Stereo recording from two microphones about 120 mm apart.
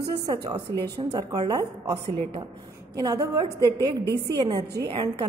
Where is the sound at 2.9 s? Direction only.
30° right (ahead or behind).